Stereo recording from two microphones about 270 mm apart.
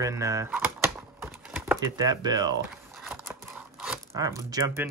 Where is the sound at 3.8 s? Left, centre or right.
Centre.